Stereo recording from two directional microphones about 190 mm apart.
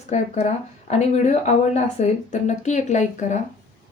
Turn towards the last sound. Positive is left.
turn(degrees=40)  # may be behind; listen again after turning